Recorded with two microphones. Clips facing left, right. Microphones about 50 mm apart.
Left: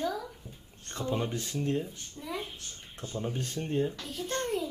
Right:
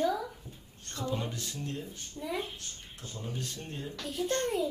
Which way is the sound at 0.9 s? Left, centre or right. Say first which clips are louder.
Left 3 dB; left.